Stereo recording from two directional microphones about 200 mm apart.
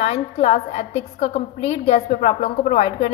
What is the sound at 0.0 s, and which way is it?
A woman's voice, 35° left (ahead or behind).